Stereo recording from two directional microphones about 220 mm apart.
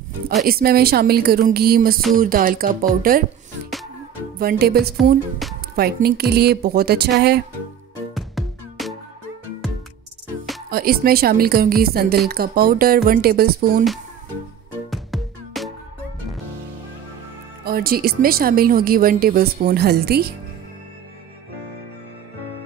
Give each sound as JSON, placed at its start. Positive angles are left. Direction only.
{"t": 0.5, "sound": "a woman's voice", "side_deg": -45}
{"t": 4.4, "sound": "a woman's voice", "side_deg": -45}
{"t": 5.4, "sound": "music", "side_deg": 0}
{"t": 5.8, "sound": "a woman's voice", "side_deg": -45}
{"t": 8.1, "sound": "music", "side_deg": 0}
{"t": 10.7, "sound": "a woman's voice", "side_deg": -45}
{"t": 14.9, "sound": "music", "side_deg": 0}
{"t": 17.6, "sound": "a woman's voice", "side_deg": -45}